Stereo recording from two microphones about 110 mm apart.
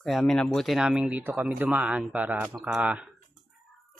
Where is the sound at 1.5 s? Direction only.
15° right (ahead or behind).